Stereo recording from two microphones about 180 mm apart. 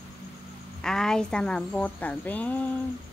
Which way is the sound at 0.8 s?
5° left (ahead or behind).